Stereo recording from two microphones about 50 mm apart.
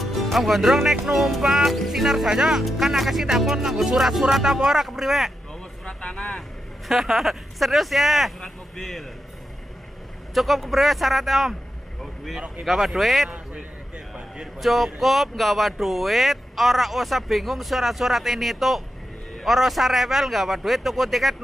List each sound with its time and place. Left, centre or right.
0.0 s speech: centre
5.9 s vehicle: centre
6.1 s speech: centre
6.9 s speech: centre
10.3 s speech: centre
12.8 s speech: centre
13.3 s a sound: right
14.6 s speech: centre